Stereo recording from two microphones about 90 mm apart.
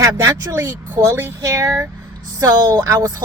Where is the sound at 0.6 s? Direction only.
25° right (ahead or behind).